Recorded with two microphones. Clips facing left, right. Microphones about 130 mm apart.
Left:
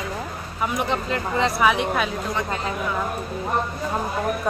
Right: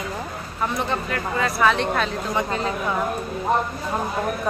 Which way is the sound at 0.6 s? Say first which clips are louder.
Left 1 dB; 15° left (ahead or behind).